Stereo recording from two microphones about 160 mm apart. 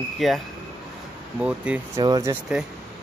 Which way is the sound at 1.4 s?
5° right (ahead or behind).